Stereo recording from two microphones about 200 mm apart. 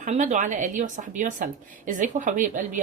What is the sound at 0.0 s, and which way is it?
A woman's voice, 40° right (ahead or behind).